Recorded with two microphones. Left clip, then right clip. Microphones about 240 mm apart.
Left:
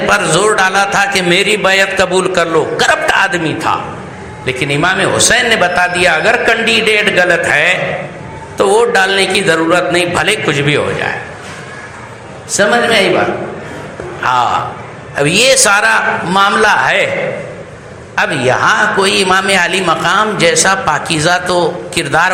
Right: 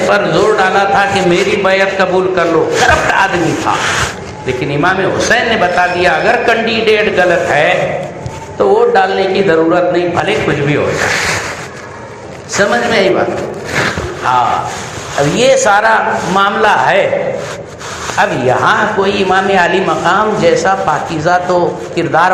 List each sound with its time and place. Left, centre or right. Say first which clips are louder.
0.1 s a man's voice: left 1 dB; left
4.4 s a man's voice: even; left
12.5 s a man's voice: left 1 dB; left
14.3 s a man's voice: even; left
18.2 s a man's voice: even; left